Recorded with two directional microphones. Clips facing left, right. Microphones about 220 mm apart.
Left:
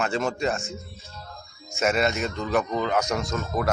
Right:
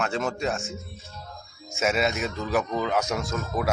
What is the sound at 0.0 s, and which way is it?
Speech, centre (ahead or behind).